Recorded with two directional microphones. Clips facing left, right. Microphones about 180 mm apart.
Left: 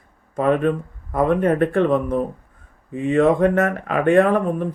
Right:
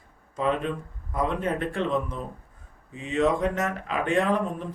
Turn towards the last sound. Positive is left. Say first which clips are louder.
# left 8 dB
turn(degrees=55)  # may be behind; listen again after turning